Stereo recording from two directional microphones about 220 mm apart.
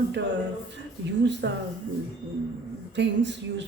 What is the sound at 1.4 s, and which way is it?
Speech, 55° right (ahead or behind).